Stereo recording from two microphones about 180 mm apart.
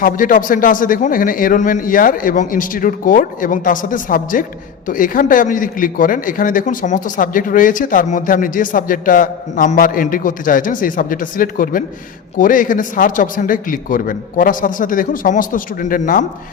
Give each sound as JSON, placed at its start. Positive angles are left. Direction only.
{"t": 0.0, "sound": "a man's voice", "side_deg": 50}